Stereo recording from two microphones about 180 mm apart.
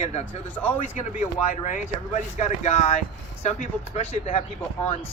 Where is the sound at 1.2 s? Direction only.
40° left (ahead or behind).